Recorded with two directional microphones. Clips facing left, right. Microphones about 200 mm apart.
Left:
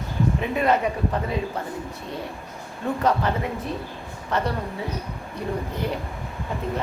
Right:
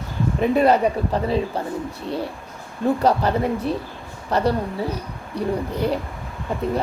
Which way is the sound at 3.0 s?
35° right (ahead or behind).